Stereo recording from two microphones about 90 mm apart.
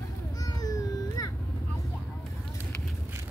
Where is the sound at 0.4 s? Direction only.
45° left (ahead or behind).